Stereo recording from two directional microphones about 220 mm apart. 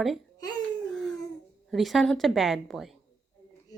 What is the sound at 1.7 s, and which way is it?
Speech, centre (ahead or behind).